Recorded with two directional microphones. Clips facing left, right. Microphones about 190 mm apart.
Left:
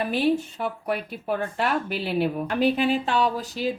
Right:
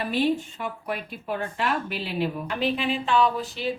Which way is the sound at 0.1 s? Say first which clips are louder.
Right 2 dB; 40° left (ahead or behind).